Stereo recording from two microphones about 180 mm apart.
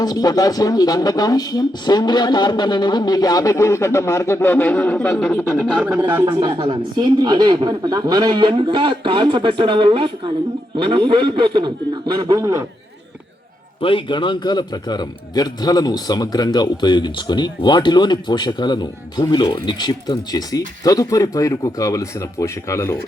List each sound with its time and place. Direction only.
0.0 s a man's voice: 20° left (ahead or behind); by 5.5 s 5° left (ahead or behind)
5.5 s speech: 10° right (ahead or behind)
6.5 s a woman's voice: 30° right (ahead or behind)
13.8 s a man's voice: 25° left (ahead or behind)